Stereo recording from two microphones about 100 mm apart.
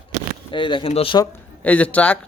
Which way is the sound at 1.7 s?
15° left (ahead or behind).